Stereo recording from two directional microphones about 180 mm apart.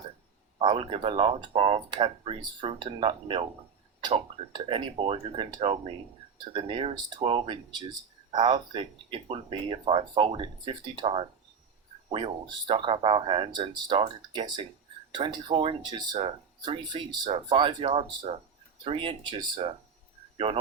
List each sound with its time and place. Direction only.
0.6 s speech: 30° right (ahead or behind)